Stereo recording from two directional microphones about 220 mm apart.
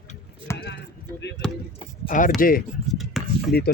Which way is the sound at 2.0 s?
35° left (ahead or behind).